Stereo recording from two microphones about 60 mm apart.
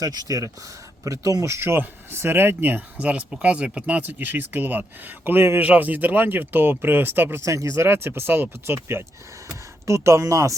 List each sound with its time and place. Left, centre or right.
0.0 s speech: right
1.6 s speech: right
3.0 s speech: right
7.4 s speech: right
9.5 s speech: right